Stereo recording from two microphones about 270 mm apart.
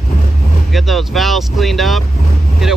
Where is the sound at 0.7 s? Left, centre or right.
Centre.